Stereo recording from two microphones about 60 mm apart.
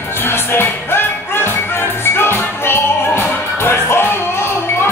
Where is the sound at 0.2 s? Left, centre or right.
Left.